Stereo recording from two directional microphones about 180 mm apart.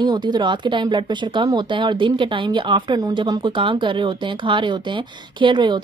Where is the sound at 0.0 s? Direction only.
25° right (ahead or behind).